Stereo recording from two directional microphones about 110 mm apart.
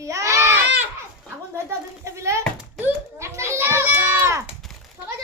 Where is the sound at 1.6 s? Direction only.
25° right (ahead or behind).